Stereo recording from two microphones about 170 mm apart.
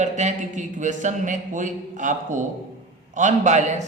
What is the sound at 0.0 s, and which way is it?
A man's voice, 45° right (ahead or behind).